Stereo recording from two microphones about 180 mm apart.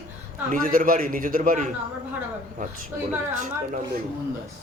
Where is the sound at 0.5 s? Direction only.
50° right (ahead or behind).